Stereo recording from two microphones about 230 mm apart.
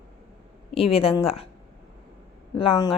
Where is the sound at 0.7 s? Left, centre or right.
Left.